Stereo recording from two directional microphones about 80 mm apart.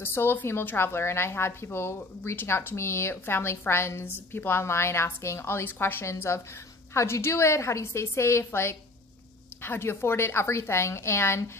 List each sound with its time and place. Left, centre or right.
0.0 s speech: left